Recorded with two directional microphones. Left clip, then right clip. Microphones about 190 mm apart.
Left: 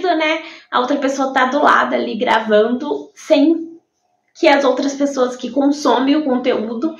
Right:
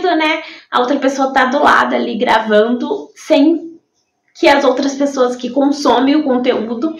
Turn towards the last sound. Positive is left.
turn(degrees=-5)  # may be behind; listen again after turning